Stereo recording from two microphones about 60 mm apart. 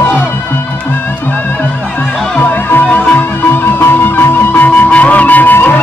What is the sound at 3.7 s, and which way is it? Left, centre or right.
Music, left.